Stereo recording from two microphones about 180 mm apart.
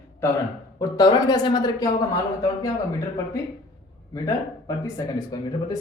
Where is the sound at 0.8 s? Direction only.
20° left (ahead or behind).